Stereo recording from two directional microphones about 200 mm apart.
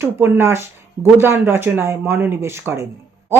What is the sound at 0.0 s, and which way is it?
Speech, 10° right (ahead or behind).